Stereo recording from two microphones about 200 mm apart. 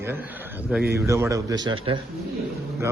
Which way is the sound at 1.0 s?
15° right (ahead or behind).